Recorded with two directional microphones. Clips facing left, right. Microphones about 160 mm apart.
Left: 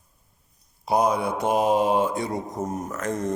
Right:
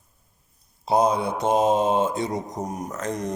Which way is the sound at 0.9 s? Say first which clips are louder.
Right 1 dB; 25° right (ahead or behind).